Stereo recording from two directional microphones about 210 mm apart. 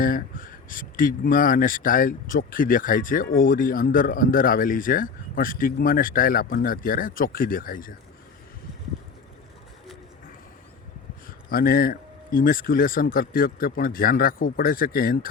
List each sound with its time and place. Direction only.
0.0 s speech: 40° left (ahead or behind)
11.4 s speech: 45° left (ahead or behind)